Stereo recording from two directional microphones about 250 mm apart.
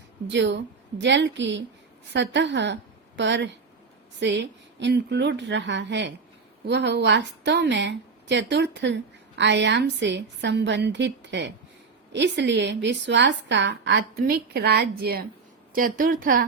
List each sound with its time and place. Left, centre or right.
0.3 s a woman's voice: right